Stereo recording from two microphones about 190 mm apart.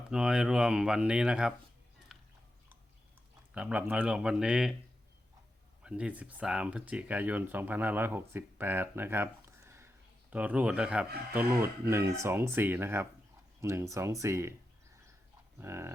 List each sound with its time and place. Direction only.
0.1 s speech: 5° right (ahead or behind)
2.1 s biting: centre (ahead or behind)
3.5 s speech: 5° right (ahead or behind)
5.8 s speech: 5° right (ahead or behind)
15.5 s speech: 15° right (ahead or behind)